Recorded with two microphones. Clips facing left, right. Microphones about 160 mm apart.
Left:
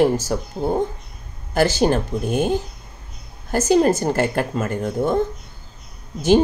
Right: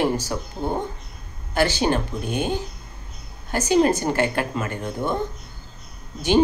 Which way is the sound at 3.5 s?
40° left (ahead or behind).